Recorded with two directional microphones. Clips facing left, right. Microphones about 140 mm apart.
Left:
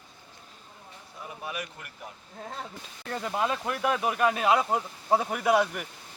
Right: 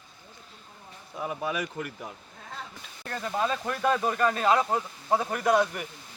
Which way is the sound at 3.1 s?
15° left (ahead or behind).